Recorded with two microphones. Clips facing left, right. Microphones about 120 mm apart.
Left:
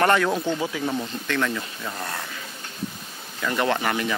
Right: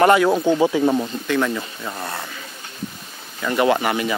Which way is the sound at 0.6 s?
30° right (ahead or behind).